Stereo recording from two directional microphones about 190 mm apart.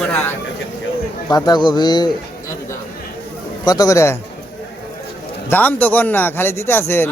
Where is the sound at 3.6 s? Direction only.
20° left (ahead or behind).